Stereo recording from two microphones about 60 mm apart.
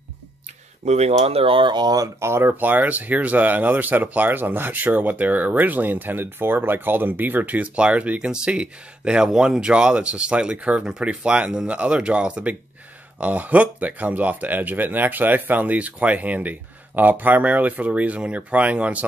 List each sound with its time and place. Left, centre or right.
2.1 s speech: right
2.5 s speech: right